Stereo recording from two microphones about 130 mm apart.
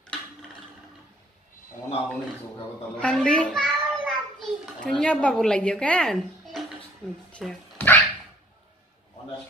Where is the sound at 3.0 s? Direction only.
10° left (ahead or behind).